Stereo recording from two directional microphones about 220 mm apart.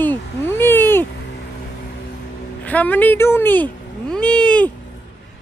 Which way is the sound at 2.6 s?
5° left (ahead or behind).